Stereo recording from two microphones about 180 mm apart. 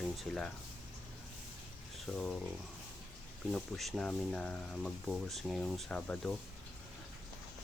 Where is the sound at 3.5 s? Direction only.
Centre (ahead or behind).